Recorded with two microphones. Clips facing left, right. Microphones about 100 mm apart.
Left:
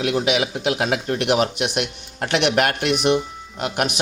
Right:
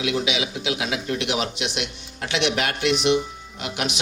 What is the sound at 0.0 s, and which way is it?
A man's voice, 50° left (ahead or behind).